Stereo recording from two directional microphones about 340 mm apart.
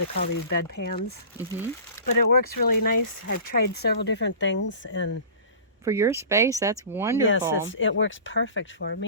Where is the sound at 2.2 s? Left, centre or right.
Left.